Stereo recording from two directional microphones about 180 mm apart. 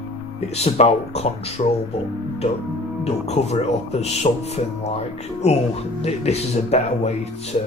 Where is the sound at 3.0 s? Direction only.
35° left (ahead or behind).